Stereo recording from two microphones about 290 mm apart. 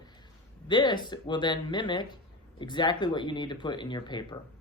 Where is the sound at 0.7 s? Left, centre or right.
Centre.